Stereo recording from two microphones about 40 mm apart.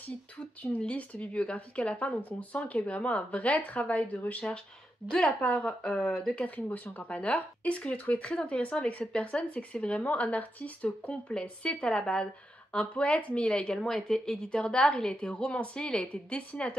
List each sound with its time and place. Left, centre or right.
0.6 s speech: left
5.4 s a woman's voice: left
6.2 s speech: left
11.4 s a woman's voice: left
12.7 s a woman's voice: left